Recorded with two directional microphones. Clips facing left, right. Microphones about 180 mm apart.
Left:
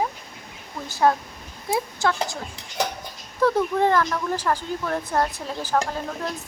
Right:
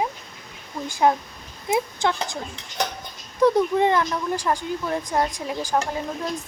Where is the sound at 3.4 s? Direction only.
15° right (ahead or behind).